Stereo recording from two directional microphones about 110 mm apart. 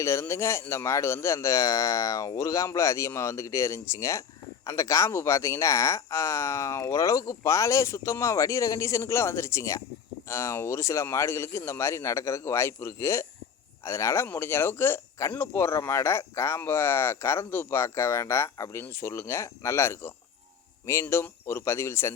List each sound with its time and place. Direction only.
0.0 s speech: 25° left (ahead or behind)